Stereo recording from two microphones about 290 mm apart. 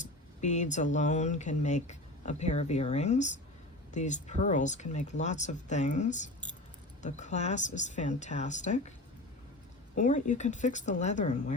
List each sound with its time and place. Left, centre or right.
0.0 s a sound: left
0.9 s speech: left
9.9 s speech: left